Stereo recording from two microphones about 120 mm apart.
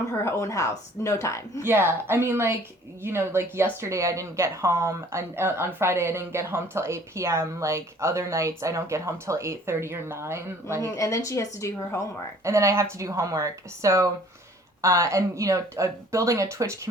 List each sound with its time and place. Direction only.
0.1 s a woman's voice: 25° left (ahead or behind)
1.6 s speech: 20° right (ahead or behind)
10.8 s a woman's voice: 25° left (ahead or behind)
12.4 s speech: 25° right (ahead or behind)